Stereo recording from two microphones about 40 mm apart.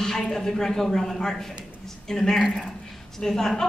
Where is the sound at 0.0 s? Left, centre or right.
Centre.